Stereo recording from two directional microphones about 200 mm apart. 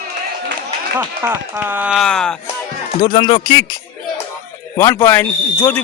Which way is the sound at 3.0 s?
25° left (ahead or behind).